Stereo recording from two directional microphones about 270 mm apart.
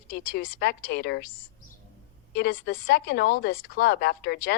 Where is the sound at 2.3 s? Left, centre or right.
Left.